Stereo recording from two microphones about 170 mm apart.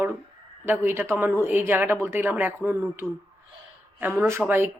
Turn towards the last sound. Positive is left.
turn(degrees=-15)  # may be behind; listen again after turning